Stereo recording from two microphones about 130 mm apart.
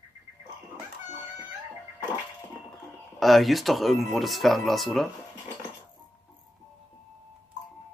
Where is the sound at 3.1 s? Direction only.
Centre (ahead or behind).